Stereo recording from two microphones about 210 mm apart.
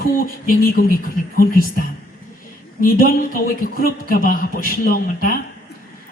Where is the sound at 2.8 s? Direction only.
45° left (ahead or behind).